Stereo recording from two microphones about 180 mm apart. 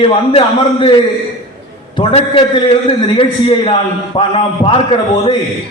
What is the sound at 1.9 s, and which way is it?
A man's voice, 30° left (ahead or behind).